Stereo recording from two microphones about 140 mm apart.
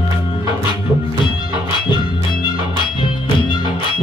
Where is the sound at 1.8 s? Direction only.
30° left (ahead or behind).